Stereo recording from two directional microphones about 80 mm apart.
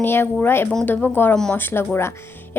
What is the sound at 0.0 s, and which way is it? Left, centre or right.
A woman's voice, left.